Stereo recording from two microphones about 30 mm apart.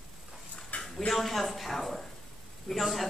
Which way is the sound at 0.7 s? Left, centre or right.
Left.